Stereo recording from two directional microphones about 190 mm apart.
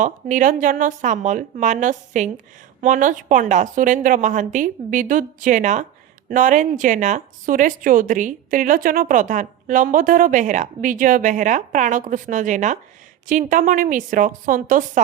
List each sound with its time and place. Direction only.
0.0 s speech: 45° right (ahead or behind)